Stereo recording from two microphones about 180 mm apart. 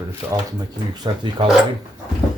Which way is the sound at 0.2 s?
10° right (ahead or behind).